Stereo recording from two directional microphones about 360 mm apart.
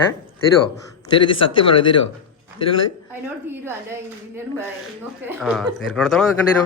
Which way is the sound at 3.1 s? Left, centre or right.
Centre.